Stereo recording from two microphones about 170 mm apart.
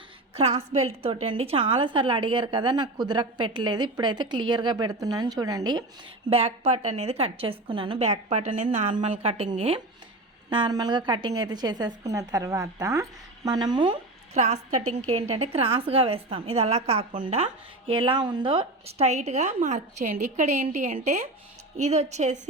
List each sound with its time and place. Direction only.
0.3 s a woman's voice: 35° right (ahead or behind)
6.3 s speech: 35° right (ahead or behind)
8.6 s a woman's voice: 35° right (ahead or behind)